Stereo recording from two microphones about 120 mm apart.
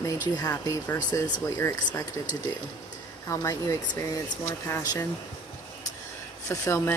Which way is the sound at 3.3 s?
25° left (ahead or behind).